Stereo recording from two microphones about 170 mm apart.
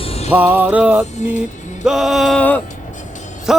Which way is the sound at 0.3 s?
10° right (ahead or behind).